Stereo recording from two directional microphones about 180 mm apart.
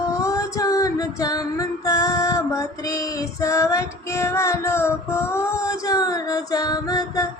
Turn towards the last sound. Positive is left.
turn(degrees=20)  # may be behind; listen again after turning